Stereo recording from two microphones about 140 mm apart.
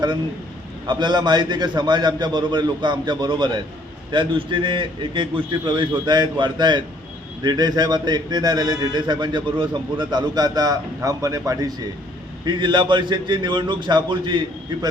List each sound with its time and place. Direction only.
0.9 s a man's voice: 35° right (ahead or behind)